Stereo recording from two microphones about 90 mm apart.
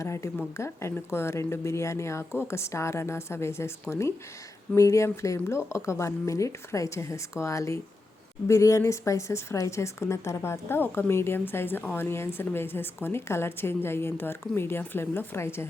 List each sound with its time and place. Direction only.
0.0 s a woman's voice: 30° left (ahead or behind)